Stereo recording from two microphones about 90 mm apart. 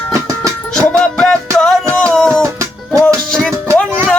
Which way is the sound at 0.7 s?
5° left (ahead or behind).